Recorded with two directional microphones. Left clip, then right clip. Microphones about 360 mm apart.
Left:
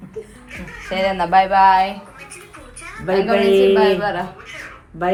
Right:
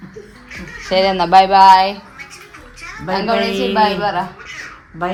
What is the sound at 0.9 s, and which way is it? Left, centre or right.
Speech, right.